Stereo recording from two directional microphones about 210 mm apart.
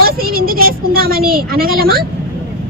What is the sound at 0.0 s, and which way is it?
Speech, 45° right (ahead or behind).